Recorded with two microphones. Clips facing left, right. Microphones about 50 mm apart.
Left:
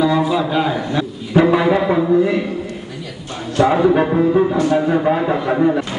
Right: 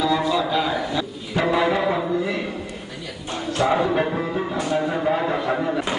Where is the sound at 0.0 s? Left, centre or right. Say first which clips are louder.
Left 5 dB; centre.